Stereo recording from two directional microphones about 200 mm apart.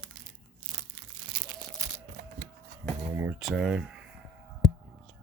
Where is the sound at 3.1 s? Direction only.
10° right (ahead or behind).